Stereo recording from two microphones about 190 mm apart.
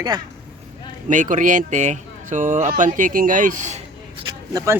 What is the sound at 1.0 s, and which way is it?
Speech, 40° right (ahead or behind).